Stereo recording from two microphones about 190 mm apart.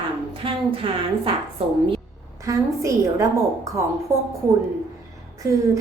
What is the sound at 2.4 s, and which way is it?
A woman's voice, 15° right (ahead or behind).